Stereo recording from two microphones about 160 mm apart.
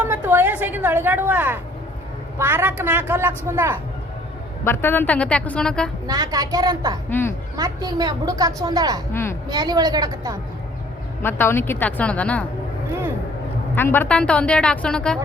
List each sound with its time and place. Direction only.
0.0 s a woman's voice: 15° right (ahead or behind)
4.6 s a woman's voice: 15° left (ahead or behind)
6.1 s a woman's voice: 25° right (ahead or behind)
7.1 s a woman's voice: 15° left (ahead or behind)
7.5 s a woman's voice: 25° right (ahead or behind)
9.1 s a woman's voice: 15° left (ahead or behind)
9.5 s a woman's voice: 25° right (ahead or behind)
11.2 s a woman's voice: 15° left (ahead or behind)
13.7 s a woman's voice: 15° left (ahead or behind)